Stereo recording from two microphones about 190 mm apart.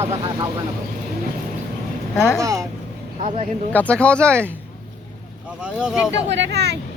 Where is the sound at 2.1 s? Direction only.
5° left (ahead or behind).